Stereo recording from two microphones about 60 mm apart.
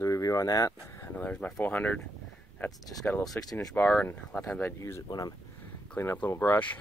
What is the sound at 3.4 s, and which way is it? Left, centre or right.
Speech, left.